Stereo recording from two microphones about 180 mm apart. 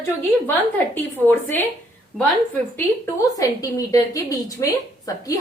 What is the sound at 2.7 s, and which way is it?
A woman's voice, 15° left (ahead or behind).